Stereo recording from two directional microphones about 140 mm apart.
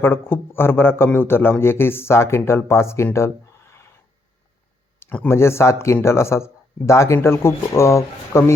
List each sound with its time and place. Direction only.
0.0 s a man's voice: 15° left (ahead or behind)
4.9 s speech: 10° left (ahead or behind)